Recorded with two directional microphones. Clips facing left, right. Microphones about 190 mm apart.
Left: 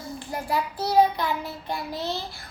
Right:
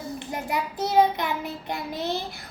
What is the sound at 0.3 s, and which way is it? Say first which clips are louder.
Child singing: left 2 dB; 20° right (ahead or behind).